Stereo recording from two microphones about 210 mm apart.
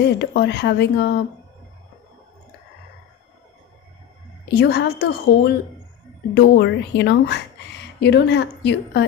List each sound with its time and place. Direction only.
0.0 s speech: 55° left (ahead or behind)
4.4 s a woman's voice: 55° left (ahead or behind)